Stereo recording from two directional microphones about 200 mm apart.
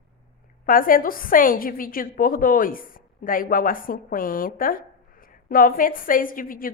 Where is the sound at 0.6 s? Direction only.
45° left (ahead or behind).